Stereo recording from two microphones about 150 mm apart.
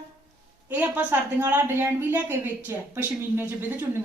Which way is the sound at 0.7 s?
10° right (ahead or behind).